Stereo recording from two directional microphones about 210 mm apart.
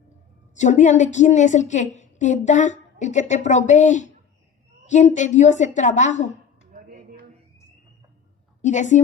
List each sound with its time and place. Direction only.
0.5 s a woman's voice: 35° left (ahead or behind)
6.7 s a sound: 40° right (ahead or behind)
8.6 s a woman's voice: 35° left (ahead or behind)